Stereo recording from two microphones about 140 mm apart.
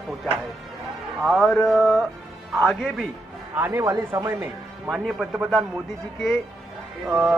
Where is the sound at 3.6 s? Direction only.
20° right (ahead or behind).